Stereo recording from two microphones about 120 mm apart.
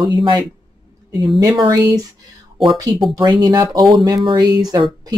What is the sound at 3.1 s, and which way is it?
Speech, 30° right (ahead or behind).